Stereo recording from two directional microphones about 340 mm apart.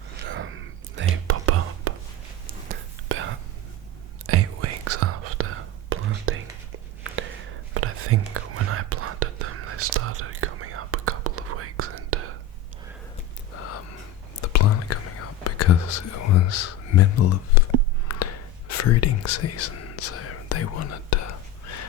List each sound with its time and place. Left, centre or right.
0.3 s whispering: right
2.5 s whispering: right
7.7 s whispering: right
14.4 s whispering: left
18.1 s a sound: left
18.8 s whispering: left